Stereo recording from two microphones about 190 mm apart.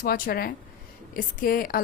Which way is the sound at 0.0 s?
55° left (ahead or behind).